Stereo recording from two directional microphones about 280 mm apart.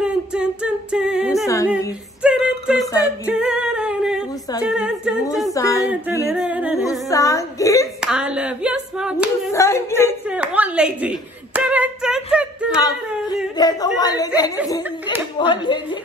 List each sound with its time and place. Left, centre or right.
0.0 s a capella: centre
2.2 s a sound: centre
3.3 s singing: centre
4.6 s humming: centre
5.5 s a sound: centre
5.9 s singing: centre
7.1 s hiccup: centre
8.0 s clapping: centre
9.5 s a sound: centre
10.2 s clapping: centre
13.6 s chatter: centre
15.3 s a sound: centre